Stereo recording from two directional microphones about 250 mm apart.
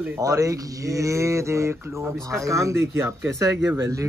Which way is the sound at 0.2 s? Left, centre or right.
Centre.